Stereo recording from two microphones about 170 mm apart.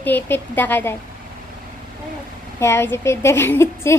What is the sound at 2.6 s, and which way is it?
A woman's voice, 15° left (ahead or behind).